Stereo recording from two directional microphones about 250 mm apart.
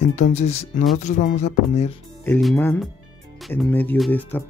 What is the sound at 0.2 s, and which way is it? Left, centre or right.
Speech, left.